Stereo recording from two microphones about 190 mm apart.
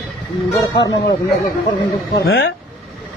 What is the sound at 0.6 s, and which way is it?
Speech, 20° left (ahead or behind).